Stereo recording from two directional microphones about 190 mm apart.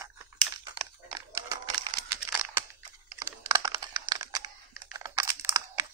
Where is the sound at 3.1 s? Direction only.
15° right (ahead or behind).